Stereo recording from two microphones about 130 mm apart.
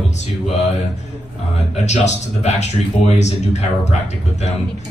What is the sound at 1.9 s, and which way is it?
Speech, 60° left (ahead or behind).